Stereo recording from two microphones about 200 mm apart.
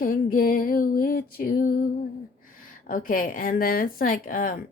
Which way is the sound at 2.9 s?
45° left (ahead or behind).